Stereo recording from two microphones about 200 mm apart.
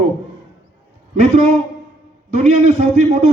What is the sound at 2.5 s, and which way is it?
Speech, 30° right (ahead or behind).